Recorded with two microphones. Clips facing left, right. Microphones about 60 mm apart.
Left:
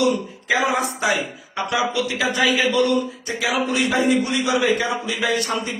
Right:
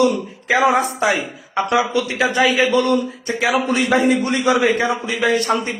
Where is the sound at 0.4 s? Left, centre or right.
Right.